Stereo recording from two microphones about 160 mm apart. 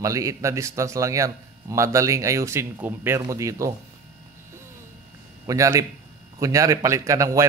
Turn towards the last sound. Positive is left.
turn(degrees=-20)  # may be behind; listen again after turning